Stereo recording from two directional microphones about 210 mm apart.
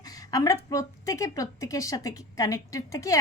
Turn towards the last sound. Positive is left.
turn(degrees=15)  # may be behind; listen again after turning